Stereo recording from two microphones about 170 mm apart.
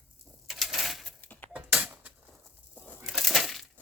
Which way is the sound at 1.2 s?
10° left (ahead or behind).